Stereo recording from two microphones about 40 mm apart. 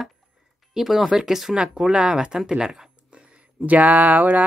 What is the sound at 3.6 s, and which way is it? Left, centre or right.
Speech, right.